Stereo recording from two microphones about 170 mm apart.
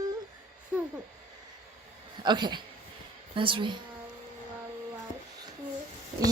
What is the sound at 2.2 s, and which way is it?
Babbling, 25° right (ahead or behind).